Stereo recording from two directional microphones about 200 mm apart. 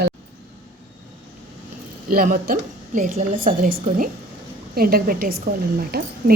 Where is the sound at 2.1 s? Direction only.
45° right (ahead or behind).